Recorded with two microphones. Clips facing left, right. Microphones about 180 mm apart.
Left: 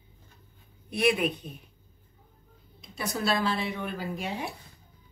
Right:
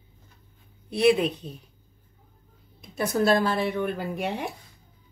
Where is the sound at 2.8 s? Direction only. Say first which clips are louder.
Right 8 dB; 50° right (ahead or behind).